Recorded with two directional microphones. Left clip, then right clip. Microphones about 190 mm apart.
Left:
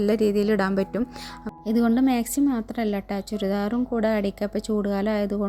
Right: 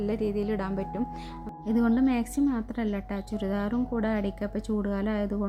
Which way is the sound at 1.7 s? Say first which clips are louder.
Left 4 dB; 25° left (ahead or behind).